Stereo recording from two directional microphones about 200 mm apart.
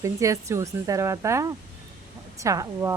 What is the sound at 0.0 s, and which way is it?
A woman's voice, 15° right (ahead or behind).